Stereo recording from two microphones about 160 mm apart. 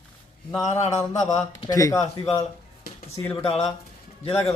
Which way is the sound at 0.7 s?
45° left (ahead or behind).